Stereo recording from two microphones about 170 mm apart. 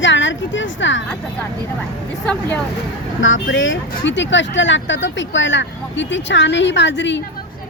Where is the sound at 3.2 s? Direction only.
90° left.